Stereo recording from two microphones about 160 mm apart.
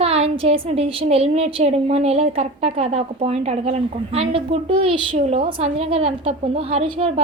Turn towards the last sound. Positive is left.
turn(degrees=-40)  # may be behind; listen again after turning